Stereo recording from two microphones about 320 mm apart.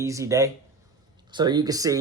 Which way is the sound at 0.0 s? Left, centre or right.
Centre.